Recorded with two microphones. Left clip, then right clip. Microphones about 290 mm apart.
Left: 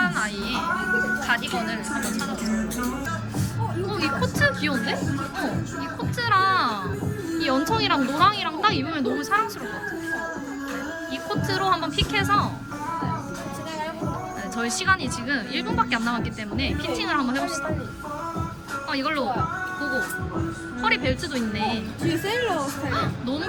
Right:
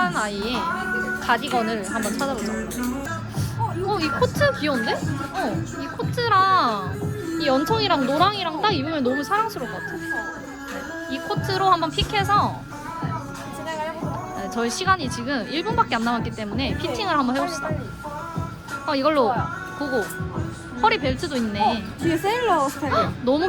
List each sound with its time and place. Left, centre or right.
0.0 s a child's voice: centre
3.8 s speech: centre
6.0 s a woman's voice: centre
11.1 s speech: centre
14.5 s speech: centre
18.9 s speech: centre
20.8 s speech: centre
22.0 s speech: right
22.9 s speech: centre